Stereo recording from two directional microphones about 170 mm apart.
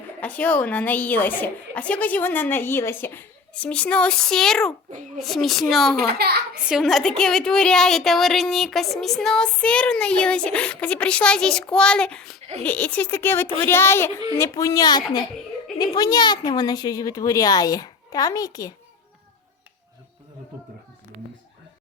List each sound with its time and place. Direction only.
0.2 s a woman's voice: 10° left (ahead or behind)
6.1 s a child's voice: 70° right (ahead or behind)
6.5 s a woman's voice: 5° right (ahead or behind); by 18.7 s 20° left (ahead or behind)